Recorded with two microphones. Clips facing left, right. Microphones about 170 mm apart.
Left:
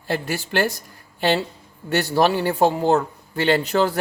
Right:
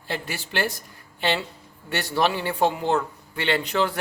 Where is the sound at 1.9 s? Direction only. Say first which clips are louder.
Left 5 dB; 45° left (ahead or behind).